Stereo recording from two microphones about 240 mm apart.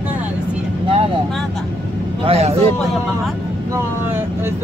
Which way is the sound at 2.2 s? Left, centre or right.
Right.